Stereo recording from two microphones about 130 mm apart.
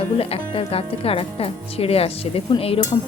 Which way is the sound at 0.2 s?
50° left (ahead or behind).